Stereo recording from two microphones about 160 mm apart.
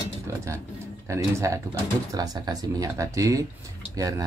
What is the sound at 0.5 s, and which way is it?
A man's voice, 20° right (ahead or behind).